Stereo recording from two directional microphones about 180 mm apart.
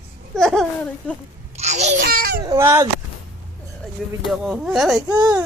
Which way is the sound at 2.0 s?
60° right (ahead or behind).